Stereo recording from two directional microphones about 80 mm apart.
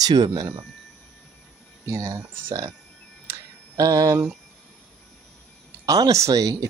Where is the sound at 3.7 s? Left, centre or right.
Right.